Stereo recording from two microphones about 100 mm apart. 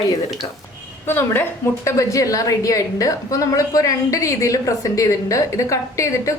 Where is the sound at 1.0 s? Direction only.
20° left (ahead or behind).